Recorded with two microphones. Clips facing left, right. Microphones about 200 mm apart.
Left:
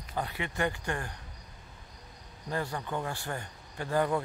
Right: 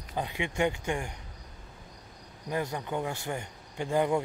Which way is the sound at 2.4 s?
15° right (ahead or behind).